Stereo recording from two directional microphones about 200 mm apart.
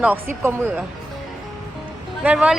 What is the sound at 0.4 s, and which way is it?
Speech, 10° right (ahead or behind).